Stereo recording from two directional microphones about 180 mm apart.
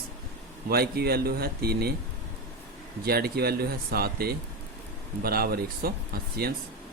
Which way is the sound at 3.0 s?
60° right (ahead or behind).